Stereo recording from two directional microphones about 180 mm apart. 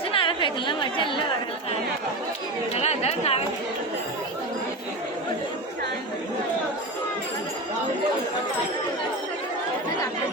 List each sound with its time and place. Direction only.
0.1 s a woman's voice: 30° left (ahead or behind)
2.7 s speech: 35° left (ahead or behind)